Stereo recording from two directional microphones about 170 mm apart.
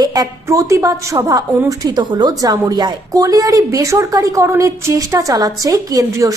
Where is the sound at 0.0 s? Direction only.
20° right (ahead or behind).